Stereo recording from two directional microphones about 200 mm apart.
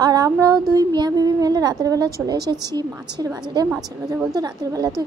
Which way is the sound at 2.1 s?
20° right (ahead or behind).